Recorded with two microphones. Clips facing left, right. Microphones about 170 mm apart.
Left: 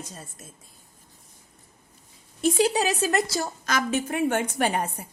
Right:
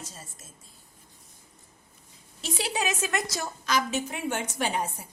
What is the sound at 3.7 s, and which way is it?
A woman's voice, 50° left (ahead or behind).